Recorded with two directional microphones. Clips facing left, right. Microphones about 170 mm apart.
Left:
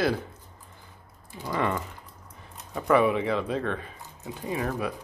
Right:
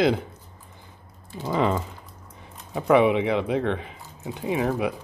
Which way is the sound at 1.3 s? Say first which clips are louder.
Right 5 dB; 20° right (ahead or behind).